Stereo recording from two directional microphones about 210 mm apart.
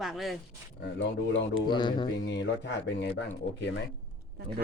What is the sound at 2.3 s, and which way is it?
Speech, 55° left (ahead or behind).